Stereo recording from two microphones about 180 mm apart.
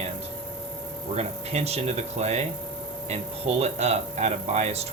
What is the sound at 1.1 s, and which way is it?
Speech, 35° right (ahead or behind).